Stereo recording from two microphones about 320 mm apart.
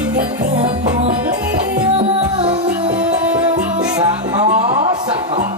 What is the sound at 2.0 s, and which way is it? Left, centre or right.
Music, centre.